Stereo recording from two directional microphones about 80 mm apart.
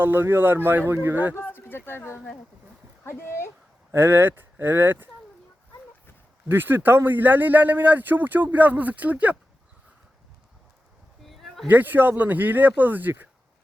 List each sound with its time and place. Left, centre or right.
0.0 s speech: right
1.6 s a sound: left
3.0 s speech: left
3.9 s speech: right
6.5 s speech: right
11.3 s a sound: centre
11.7 s speech: right